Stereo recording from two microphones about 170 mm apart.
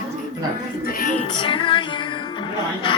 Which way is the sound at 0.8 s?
55° left (ahead or behind).